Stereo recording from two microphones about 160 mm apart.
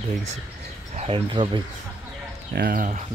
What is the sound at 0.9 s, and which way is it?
Speech, 40° right (ahead or behind).